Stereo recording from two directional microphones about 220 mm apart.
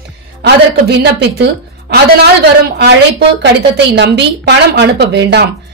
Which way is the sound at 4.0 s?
50° right (ahead or behind).